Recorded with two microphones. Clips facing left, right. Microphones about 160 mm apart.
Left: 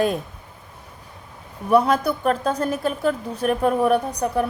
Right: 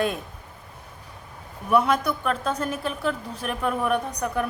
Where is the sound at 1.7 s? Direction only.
35° left (ahead or behind).